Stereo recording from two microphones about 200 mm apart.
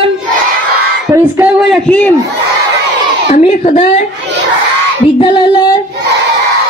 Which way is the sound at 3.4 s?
35° left (ahead or behind).